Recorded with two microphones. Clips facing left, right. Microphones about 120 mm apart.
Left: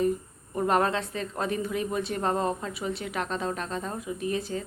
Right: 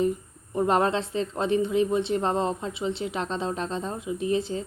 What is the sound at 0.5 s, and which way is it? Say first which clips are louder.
A woman's voice: right 2 dB; 25° right (ahead or behind).